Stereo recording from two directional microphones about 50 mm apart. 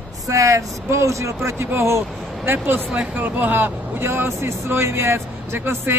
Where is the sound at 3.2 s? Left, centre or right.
Right.